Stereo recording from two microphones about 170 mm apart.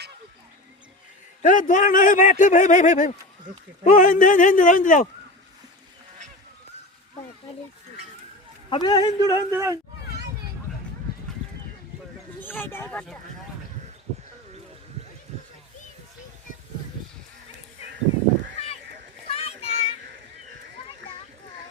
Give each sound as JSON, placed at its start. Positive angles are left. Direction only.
{"t": 1.4, "sound": "a man's voice", "side_deg": 50}
{"t": 8.7, "sound": "a man's voice", "side_deg": 25}
{"t": 9.2, "sound": "speech", "side_deg": -20}
{"t": 12.4, "sound": "speech", "side_deg": 10}
{"t": 19.3, "sound": "a sound", "side_deg": 35}